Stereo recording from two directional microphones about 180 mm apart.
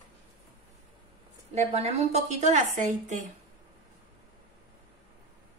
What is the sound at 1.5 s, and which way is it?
A woman's voice, 35° right (ahead or behind).